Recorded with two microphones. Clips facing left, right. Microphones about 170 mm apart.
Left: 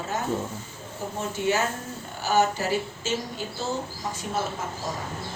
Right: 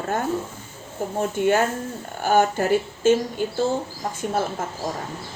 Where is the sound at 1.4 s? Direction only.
50° right (ahead or behind).